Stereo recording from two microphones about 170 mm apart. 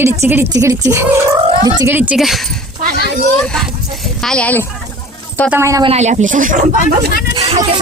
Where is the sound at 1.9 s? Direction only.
5° right (ahead or behind).